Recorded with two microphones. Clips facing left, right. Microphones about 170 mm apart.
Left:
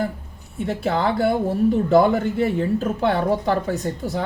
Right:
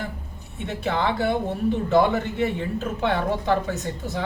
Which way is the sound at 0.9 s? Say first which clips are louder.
Left 3 dB; 40° left (ahead or behind).